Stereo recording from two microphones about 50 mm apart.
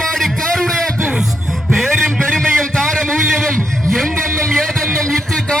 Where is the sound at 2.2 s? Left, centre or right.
Centre.